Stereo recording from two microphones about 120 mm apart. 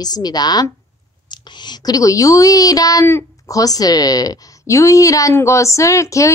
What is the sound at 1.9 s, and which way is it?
Speech, 30° left (ahead or behind).